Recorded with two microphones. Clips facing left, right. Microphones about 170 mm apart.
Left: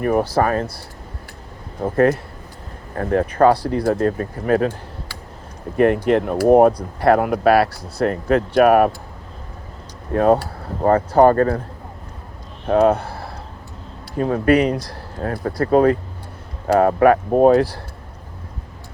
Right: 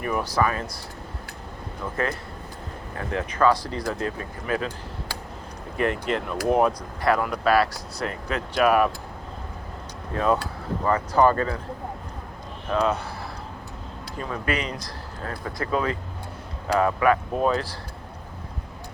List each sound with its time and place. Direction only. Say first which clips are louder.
0.0 s speech: left 7 dB; 50° left (ahead or behind)
1.8 s speech: left 12 dB; 55° left (ahead or behind)
4.0 s speech: left 10 dB; 50° left (ahead or behind)
5.7 s speech: left 10 dB; 55° left (ahead or behind)
10.8 s speech: left 7 dB; 55° left (ahead or behind)
12.6 s speech: left 9 dB; 55° left (ahead or behind)